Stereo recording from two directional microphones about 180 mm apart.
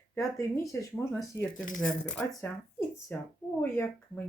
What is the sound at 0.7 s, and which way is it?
Speech, 10° left (ahead or behind).